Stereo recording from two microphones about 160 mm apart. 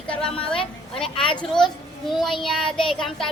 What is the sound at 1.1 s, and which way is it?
Speech, 35° left (ahead or behind).